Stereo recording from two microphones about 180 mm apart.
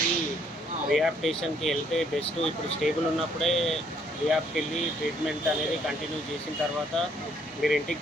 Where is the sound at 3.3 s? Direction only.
Centre (ahead or behind).